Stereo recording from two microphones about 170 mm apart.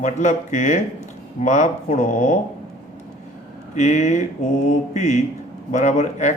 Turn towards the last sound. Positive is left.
turn(degrees=45)  # may be behind; listen again after turning